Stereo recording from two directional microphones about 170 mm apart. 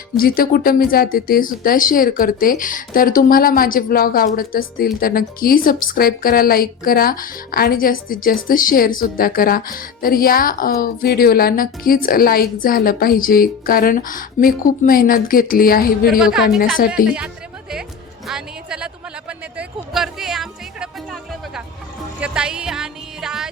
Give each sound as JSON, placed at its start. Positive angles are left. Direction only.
{"t": 0.2, "sound": "a woman's voice", "side_deg": 60}
{"t": 16.0, "sound": "a woman's voice", "side_deg": -5}
{"t": 17.1, "sound": "music", "side_deg": -5}